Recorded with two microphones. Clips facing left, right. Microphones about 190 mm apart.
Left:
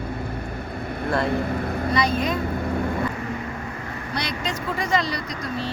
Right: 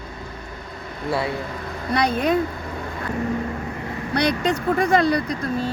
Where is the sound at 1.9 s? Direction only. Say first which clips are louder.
Right 4 dB; 60° right (ahead or behind).